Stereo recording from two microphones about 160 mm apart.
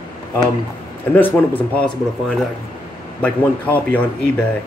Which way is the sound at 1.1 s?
10° left (ahead or behind).